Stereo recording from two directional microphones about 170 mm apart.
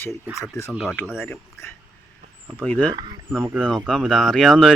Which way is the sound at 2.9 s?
25° right (ahead or behind).